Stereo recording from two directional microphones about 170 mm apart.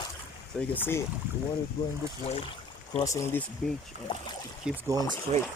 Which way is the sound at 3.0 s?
20° left (ahead or behind).